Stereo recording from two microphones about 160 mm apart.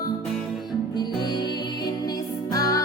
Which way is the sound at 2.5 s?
20° left (ahead or behind).